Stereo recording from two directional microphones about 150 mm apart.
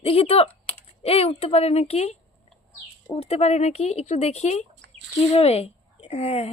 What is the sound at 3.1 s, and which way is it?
Speech, 45° left (ahead or behind).